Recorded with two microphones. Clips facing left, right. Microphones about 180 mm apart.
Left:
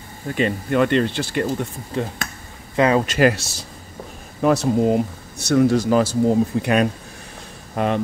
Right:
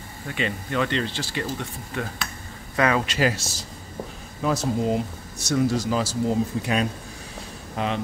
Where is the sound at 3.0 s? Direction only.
55° left (ahead or behind).